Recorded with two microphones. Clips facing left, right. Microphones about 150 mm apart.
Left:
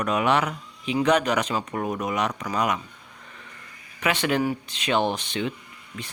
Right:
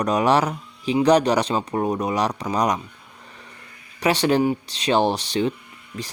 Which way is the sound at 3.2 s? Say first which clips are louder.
Right 2 dB; 35° right (ahead or behind).